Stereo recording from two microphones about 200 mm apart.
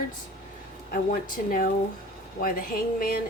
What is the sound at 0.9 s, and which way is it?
Speech, 45° left (ahead or behind).